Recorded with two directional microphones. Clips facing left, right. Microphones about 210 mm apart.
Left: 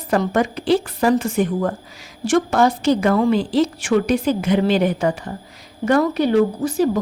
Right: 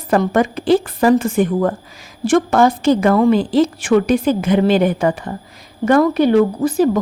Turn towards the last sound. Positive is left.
turn(degrees=-55)  # may be behind; listen again after turning